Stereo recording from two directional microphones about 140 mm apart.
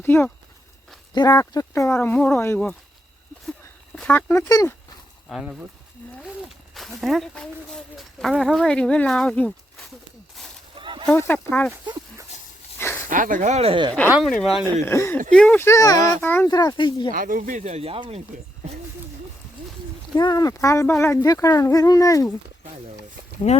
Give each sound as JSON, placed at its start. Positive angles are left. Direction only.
{"t": 0.0, "sound": "speech", "side_deg": 15}
{"t": 1.1, "sound": "speech", "side_deg": 30}
{"t": 3.9, "sound": "speech", "side_deg": 10}
{"t": 5.3, "sound": "speech", "side_deg": -5}
{"t": 6.7, "sound": "speech", "side_deg": 0}
{"t": 10.8, "sound": "a sound", "side_deg": -35}
{"t": 11.2, "sound": "speech", "side_deg": 15}
{"t": 13.1, "sound": "speech", "side_deg": -70}
{"t": 14.2, "sound": "speech", "side_deg": 0}
{"t": 14.7, "sound": "speech", "side_deg": 15}
{"t": 16.5, "sound": "speech", "side_deg": 30}
{"t": 17.1, "sound": "speech", "side_deg": -80}
{"t": 20.1, "sound": "speech", "side_deg": 30}
{"t": 23.5, "sound": "speech", "side_deg": 50}